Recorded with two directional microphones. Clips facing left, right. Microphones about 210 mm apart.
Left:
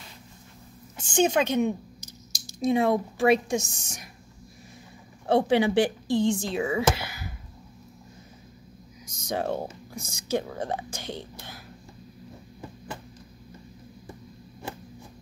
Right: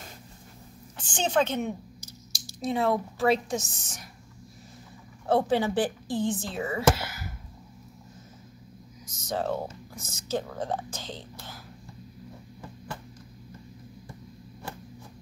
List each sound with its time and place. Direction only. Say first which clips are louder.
0.9 s speech: left 3 dB; 10° left (ahead or behind)
5.3 s speech: left 3 dB; 75° left (ahead or behind)
6.3 s speech: left 4 dB; 15° left (ahead or behind)
9.0 s speech: left 1 dB; 10° left (ahead or behind)